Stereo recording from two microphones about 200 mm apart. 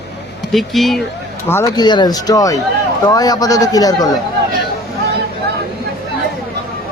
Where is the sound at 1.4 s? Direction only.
15° left (ahead or behind).